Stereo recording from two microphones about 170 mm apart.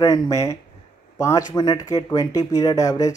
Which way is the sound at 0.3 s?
20° left (ahead or behind).